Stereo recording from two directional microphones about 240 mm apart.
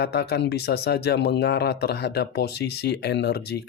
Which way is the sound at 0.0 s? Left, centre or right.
Left.